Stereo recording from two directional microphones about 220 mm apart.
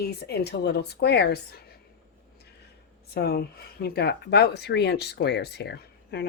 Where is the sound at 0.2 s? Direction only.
45° left (ahead or behind).